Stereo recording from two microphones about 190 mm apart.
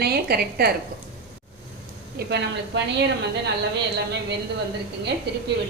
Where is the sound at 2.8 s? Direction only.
65° right (ahead or behind).